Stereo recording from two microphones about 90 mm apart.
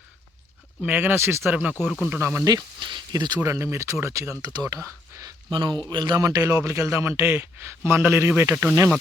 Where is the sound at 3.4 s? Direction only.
30° right (ahead or behind).